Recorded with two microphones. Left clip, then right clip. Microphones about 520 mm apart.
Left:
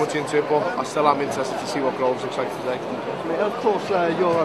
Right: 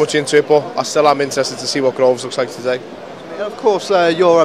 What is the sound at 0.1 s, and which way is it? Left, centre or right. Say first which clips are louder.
Speech: right 8 dB; right.